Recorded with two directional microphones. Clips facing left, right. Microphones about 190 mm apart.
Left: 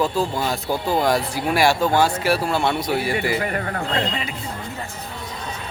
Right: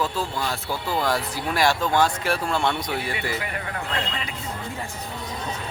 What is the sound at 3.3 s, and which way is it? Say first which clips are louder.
Speech: left 6 dB; 50° left (ahead or behind).